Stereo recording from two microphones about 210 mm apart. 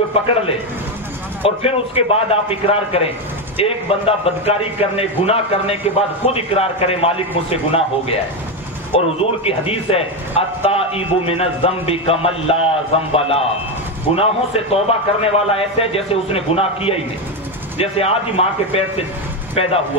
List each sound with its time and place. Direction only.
0.1 s a man's voice: 30° left (ahead or behind)